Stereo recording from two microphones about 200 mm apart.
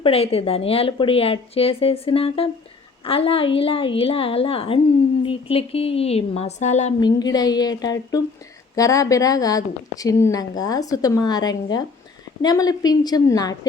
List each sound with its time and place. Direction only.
0.0 s a woman's voice: 30° left (ahead or behind)
7.0 s a woman's voice: 20° left (ahead or behind)